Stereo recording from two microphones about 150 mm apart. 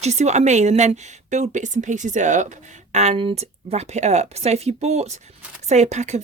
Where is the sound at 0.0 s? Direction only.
50° right (ahead or behind).